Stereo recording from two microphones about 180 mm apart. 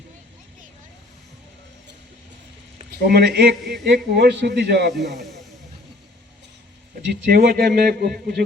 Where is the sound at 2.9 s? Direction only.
60° right (ahead or behind).